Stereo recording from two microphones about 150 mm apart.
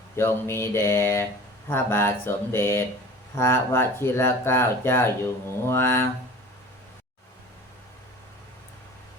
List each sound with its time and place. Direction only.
0.2 s speech: 15° left (ahead or behind)